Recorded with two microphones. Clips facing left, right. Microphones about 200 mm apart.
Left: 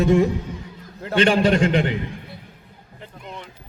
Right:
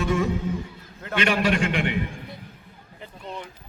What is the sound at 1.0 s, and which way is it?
Speech, 30° left (ahead or behind).